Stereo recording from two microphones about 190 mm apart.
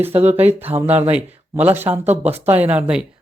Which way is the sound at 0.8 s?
10° right (ahead or behind).